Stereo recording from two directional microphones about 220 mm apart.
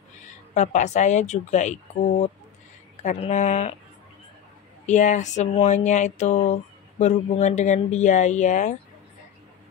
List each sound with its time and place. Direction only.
0.2 s a woman's voice: 35° left (ahead or behind)
3.0 s speech: 30° left (ahead or behind)
4.8 s speech: 35° left (ahead or behind)